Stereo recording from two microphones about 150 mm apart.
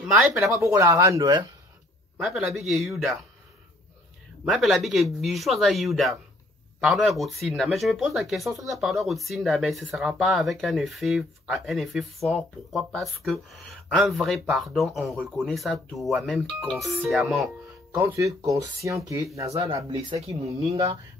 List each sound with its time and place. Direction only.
0.1 s speech: centre (ahead or behind)
0.5 s speech: 20° right (ahead or behind)
2.1 s speech: centre (ahead or behind)
4.5 s speech: centre (ahead or behind)
17.9 s speech: 20° right (ahead or behind)